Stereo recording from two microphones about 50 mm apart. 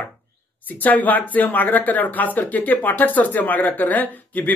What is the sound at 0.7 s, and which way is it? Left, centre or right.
Speech, left.